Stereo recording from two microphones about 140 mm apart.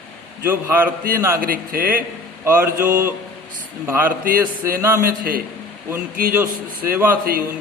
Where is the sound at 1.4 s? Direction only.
90° right.